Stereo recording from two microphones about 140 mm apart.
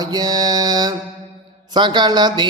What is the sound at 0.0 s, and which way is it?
Mantra, 30° right (ahead or behind).